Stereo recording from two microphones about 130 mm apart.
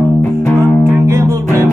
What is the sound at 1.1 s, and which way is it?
Music, 20° right (ahead or behind).